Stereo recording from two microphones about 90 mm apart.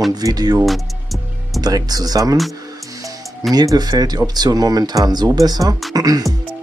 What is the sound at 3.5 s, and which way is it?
Speech, 50° right (ahead or behind).